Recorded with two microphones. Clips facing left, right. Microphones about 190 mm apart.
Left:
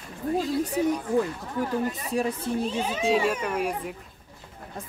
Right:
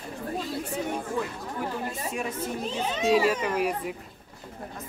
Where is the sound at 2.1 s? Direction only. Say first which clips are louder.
Left 8 dB; 35° left (ahead or behind).